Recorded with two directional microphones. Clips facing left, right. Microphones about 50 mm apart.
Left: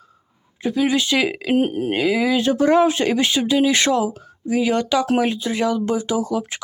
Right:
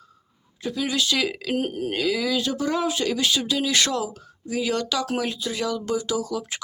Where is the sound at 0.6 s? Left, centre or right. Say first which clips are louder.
Left 6 dB; left.